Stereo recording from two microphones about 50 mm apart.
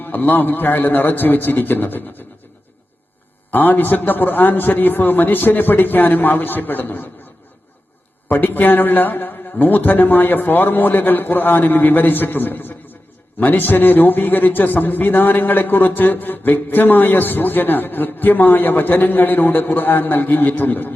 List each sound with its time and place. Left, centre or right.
0.0 s a man's voice: left
3.5 s a man's voice: left
8.3 s a man's voice: left